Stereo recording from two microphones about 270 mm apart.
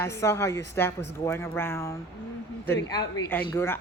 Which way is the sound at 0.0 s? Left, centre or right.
Centre.